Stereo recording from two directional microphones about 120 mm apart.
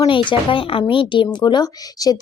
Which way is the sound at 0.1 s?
45° left (ahead or behind).